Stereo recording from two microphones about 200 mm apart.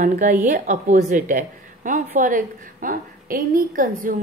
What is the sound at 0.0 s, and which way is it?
A woman's voice, 40° right (ahead or behind).